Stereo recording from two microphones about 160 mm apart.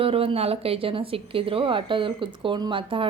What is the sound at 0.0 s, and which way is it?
A woman's voice, 35° right (ahead or behind).